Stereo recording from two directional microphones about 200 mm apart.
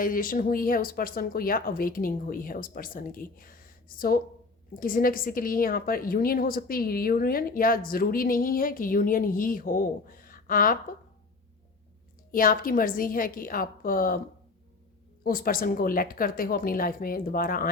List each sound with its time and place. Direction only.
0.0 s a woman's voice: 45° left (ahead or behind)
12.3 s a woman's voice: 45° left (ahead or behind)
15.2 s a woman's voice: 45° left (ahead or behind)